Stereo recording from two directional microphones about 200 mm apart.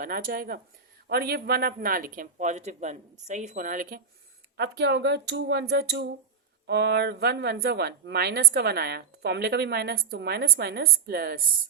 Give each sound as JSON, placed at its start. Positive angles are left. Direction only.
{"t": 0.0, "sound": "speech", "side_deg": -45}
{"t": 4.5, "sound": "speech", "side_deg": -55}